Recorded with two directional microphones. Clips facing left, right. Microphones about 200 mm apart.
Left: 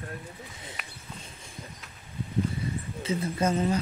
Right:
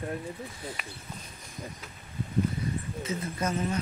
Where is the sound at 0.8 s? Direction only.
Centre (ahead or behind).